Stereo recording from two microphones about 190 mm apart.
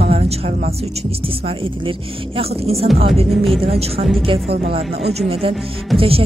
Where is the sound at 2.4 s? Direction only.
30° right (ahead or behind).